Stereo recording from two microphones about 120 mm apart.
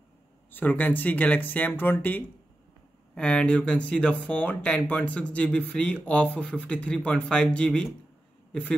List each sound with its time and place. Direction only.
0.5 s speech: 15° left (ahead or behind)